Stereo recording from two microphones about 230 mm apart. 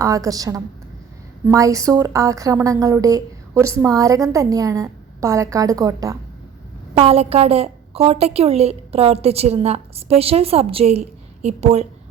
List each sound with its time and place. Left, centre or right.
0.0 s a woman's voice: centre
6.9 s a woman's voice: right